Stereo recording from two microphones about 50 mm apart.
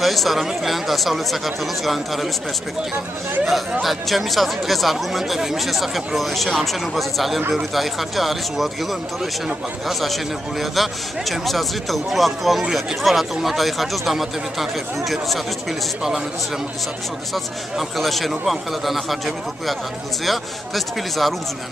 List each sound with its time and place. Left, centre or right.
0.0 s speech: centre
3.8 s speech: centre
9.8 s speech: centre
17.3 s speech: centre